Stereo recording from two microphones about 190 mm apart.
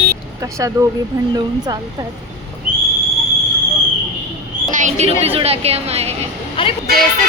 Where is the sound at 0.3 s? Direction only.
15° right (ahead or behind).